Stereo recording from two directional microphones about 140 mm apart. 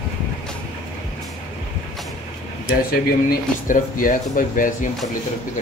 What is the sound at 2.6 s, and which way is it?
Speech, 90° left.